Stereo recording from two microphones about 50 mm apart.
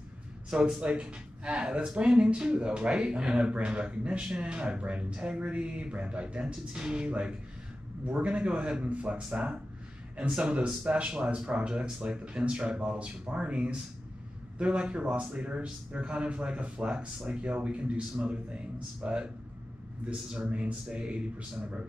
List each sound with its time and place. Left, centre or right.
0.5 s speech: centre